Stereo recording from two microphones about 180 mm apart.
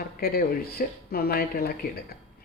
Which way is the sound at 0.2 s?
60° left (ahead or behind).